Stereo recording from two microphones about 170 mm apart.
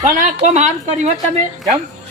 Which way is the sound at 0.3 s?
40° right (ahead or behind).